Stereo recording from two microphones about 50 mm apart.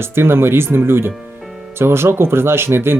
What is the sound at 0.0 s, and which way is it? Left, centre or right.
Speech, right.